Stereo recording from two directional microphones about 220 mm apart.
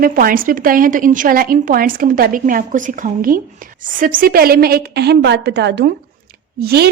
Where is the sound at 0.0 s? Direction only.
40° right (ahead or behind).